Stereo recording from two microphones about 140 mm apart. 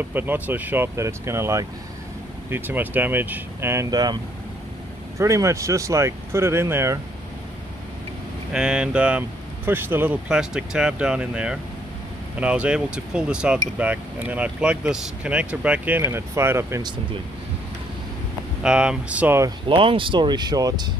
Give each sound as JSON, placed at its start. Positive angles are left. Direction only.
{"t": 0.1, "sound": "speech", "side_deg": -15}
{"t": 8.5, "sound": "speech", "side_deg": -5}
{"t": 18.6, "sound": "speech", "side_deg": -5}
{"t": 19.7, "sound": "speech", "side_deg": -40}